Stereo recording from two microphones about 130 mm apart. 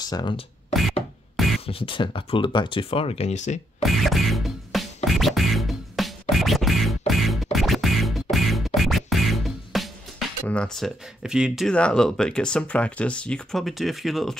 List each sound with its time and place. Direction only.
0.0 s speech: 35° left (ahead or behind)
1.3 s music: centre (ahead or behind)
1.7 s speech: 45° left (ahead or behind); by 3.5 s 60° left (ahead or behind)
3.8 s music: centre (ahead or behind)
11.7 s speech: 5° left (ahead or behind)